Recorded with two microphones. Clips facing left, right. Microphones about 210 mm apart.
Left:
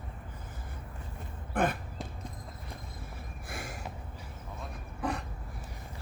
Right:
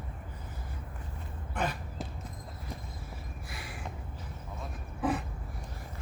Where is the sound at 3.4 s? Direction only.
45° left (ahead or behind).